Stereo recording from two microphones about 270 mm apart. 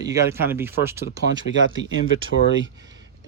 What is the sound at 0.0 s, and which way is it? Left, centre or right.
Speech, centre.